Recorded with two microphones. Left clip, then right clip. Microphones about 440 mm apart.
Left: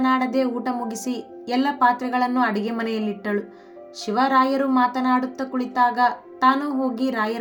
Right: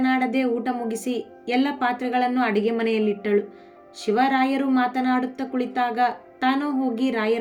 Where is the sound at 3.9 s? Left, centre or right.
Centre.